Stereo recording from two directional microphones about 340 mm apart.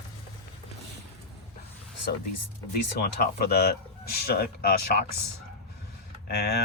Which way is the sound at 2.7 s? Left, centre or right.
Left.